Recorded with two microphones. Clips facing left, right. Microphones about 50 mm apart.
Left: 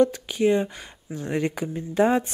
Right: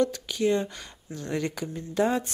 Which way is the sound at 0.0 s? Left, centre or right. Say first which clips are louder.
Left 5 dB; left.